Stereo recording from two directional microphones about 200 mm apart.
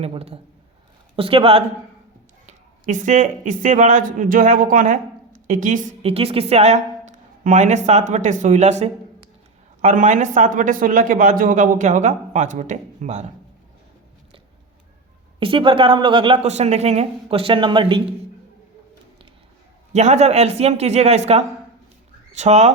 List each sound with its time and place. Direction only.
0.0 s speech: 30° right (ahead or behind)
2.5 s speech: 40° right (ahead or behind)
15.4 s speech: 25° right (ahead or behind)
19.9 s speech: 35° right (ahead or behind)